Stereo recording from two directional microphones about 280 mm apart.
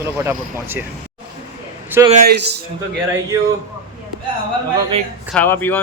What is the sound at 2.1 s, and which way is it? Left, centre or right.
Speech, right.